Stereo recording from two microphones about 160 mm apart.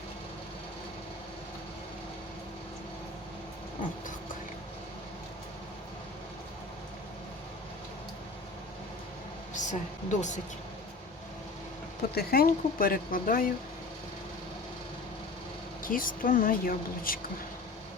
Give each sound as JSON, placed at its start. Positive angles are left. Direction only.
{"t": 9.6, "sound": "speech", "side_deg": 50}
{"t": 12.1, "sound": "speech", "side_deg": 75}
{"t": 15.8, "sound": "speech", "side_deg": 60}